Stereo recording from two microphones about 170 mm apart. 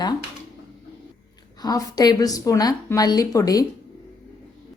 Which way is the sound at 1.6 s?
20° left (ahead or behind).